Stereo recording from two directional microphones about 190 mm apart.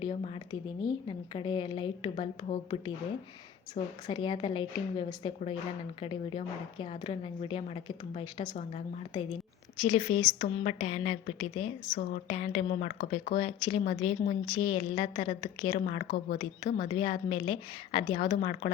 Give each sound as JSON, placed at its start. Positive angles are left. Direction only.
{"t": 0.0, "sound": "a woman's voice", "side_deg": 30}
{"t": 4.0, "sound": "a woman's voice", "side_deg": 25}
{"t": 13.4, "sound": "a woman's voice", "side_deg": 30}
{"t": 16.9, "sound": "a woman's voice", "side_deg": 30}